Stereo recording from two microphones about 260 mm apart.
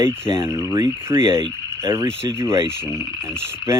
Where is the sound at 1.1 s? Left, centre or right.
Left.